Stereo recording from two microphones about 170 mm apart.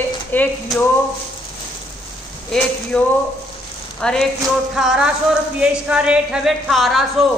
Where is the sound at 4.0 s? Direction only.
5° left (ahead or behind).